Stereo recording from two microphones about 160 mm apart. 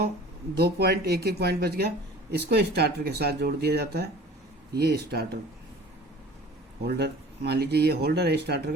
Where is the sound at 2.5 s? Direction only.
90° right.